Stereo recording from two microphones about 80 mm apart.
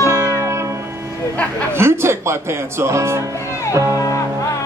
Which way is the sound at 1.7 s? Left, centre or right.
Right.